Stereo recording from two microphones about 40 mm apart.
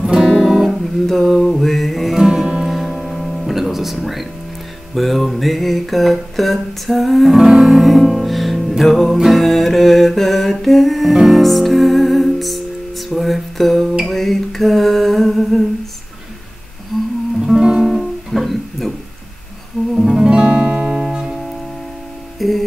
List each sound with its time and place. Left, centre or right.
0.0 s music: centre
0.4 s music: centre
1.0 s music: centre
2.1 s music: centre
2.7 s music: centre
4.9 s a sound: centre
14.0 s music: centre
17.4 s guitar: centre
19.9 s music: centre
20.2 s music: right
22.4 s music: centre